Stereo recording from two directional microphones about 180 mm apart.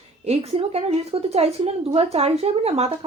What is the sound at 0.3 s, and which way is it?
A woman's voice, 35° right (ahead or behind).